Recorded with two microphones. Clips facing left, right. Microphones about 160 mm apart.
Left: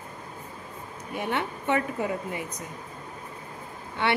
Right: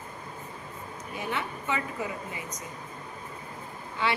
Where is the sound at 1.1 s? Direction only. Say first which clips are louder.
Left 4 dB; 65° left (ahead or behind).